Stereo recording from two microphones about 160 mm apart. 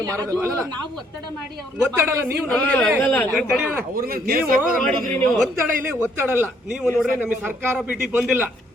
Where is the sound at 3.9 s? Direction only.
65° right (ahead or behind).